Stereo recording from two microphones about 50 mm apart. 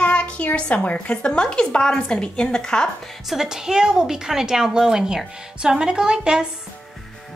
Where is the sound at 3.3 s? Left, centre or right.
Centre.